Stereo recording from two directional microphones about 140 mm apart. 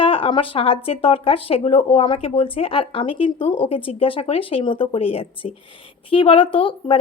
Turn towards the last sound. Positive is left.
turn(degrees=40)  # may be behind; listen again after turning